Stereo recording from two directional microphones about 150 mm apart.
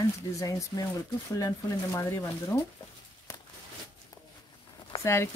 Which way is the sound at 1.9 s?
15° left (ahead or behind).